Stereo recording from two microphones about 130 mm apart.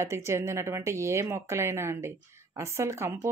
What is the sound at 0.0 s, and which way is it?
A woman's voice, 20° right (ahead or behind).